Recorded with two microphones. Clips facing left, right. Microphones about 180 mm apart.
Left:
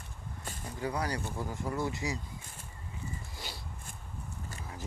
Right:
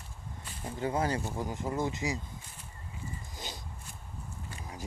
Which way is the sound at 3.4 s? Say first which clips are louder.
Right 1 dB; 20° right (ahead or behind).